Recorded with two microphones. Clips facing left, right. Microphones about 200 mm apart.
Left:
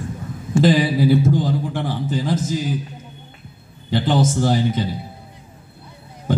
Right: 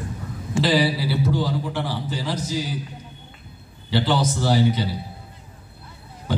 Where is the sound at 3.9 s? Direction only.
50° left (ahead or behind).